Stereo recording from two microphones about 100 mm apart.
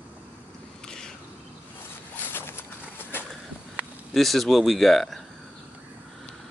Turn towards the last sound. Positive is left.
turn(degrees=0)  # may be behind; listen again after turning